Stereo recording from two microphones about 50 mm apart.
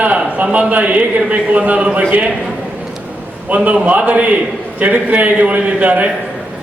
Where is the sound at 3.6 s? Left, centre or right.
Right.